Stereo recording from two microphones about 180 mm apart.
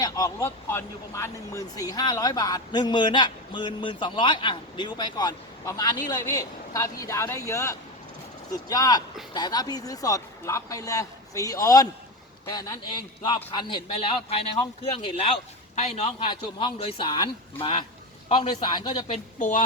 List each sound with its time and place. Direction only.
0.0 s speech: 20° left (ahead or behind)
19.0 s speech: 40° left (ahead or behind)